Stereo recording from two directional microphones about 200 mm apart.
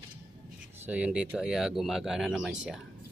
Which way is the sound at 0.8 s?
5° right (ahead or behind).